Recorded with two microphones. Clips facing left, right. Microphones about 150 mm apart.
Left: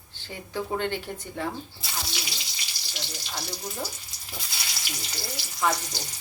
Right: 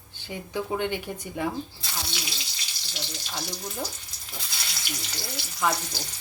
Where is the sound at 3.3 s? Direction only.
5° left (ahead or behind).